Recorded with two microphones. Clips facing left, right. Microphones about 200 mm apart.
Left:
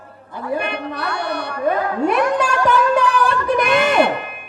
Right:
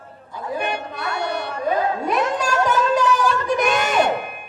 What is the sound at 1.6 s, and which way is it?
Music, 60° left (ahead or behind).